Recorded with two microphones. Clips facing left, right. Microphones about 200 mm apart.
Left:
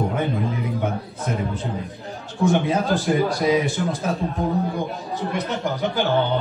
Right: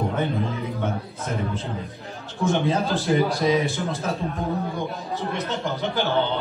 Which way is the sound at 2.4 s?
15° left (ahead or behind).